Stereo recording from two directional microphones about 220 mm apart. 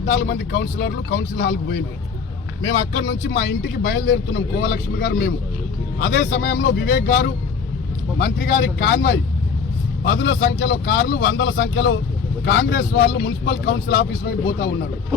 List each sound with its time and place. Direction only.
0.0 s speech: 50° left (ahead or behind)